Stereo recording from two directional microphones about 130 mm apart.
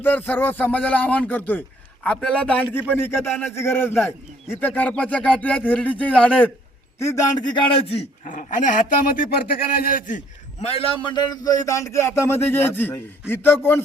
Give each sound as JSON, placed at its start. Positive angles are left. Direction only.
{"t": 0.0, "sound": "speech", "side_deg": 15}
{"t": 7.0, "sound": "a man's voice", "side_deg": 25}
{"t": 8.2, "sound": "speech", "side_deg": 80}
{"t": 10.6, "sound": "a man's voice", "side_deg": 45}